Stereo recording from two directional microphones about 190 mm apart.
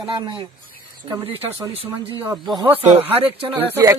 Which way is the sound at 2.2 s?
Centre (ahead or behind).